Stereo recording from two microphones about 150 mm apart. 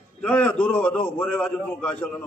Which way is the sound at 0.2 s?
10° left (ahead or behind).